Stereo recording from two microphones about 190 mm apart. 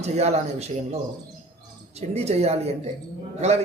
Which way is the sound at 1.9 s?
35° right (ahead or behind).